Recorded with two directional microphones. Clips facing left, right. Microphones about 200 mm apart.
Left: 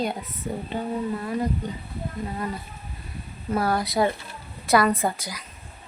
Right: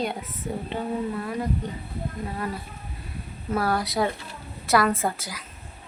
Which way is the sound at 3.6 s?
Centre (ahead or behind).